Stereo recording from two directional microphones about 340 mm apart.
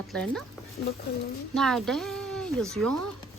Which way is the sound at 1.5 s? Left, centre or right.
Centre.